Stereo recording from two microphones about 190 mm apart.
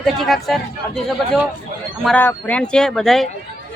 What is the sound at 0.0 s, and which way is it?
Speech, centre (ahead or behind).